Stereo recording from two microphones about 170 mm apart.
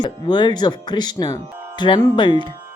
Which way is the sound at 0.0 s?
25° left (ahead or behind).